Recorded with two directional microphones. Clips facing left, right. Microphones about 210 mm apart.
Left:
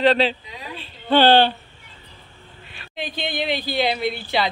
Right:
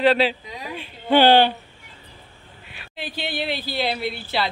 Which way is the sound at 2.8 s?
10° right (ahead or behind).